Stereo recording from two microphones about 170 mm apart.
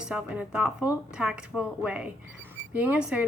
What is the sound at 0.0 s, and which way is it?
Speech, 5° right (ahead or behind).